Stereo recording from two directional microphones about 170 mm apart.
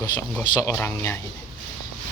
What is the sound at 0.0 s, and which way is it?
Speech, 15° left (ahead or behind).